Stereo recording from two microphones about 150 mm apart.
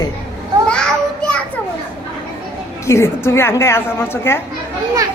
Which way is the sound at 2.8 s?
20° left (ahead or behind).